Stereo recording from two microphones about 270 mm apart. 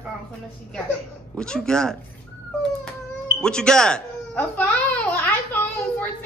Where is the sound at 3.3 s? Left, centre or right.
Centre.